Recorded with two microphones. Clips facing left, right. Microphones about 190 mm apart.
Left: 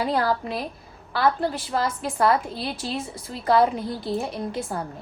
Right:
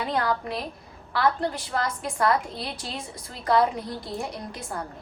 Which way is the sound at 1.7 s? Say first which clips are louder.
Left 3 dB; 30° left (ahead or behind).